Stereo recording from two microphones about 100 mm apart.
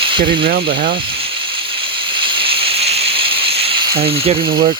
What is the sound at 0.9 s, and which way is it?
Snake, 60° right (ahead or behind).